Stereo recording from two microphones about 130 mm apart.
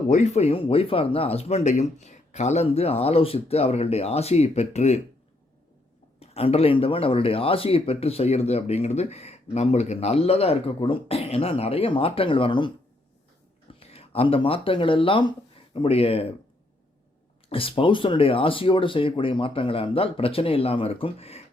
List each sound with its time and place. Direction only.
0.1 s speech: 60° left (ahead or behind)
6.1 s speech: 50° left (ahead or behind)
13.7 s speech: 50° left (ahead or behind)
17.5 s speech: 45° left (ahead or behind)